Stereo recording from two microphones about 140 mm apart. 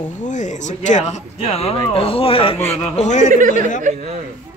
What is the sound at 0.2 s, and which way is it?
Speech, 60° left (ahead or behind).